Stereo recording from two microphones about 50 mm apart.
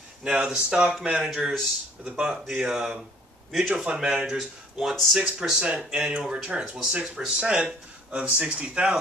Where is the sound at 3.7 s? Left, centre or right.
Centre.